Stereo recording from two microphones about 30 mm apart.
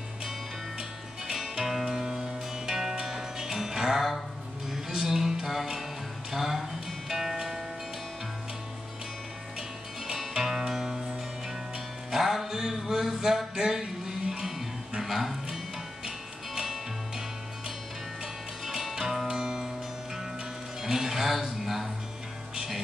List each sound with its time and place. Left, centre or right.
0.7 s music: right
10.3 s music: centre
13.6 s mantra: centre
15.0 s music: centre
19.2 s music: centre
20.8 s music: centre